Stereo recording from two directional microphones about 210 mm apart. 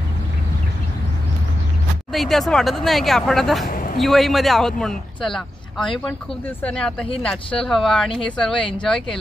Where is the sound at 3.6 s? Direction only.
40° left (ahead or behind).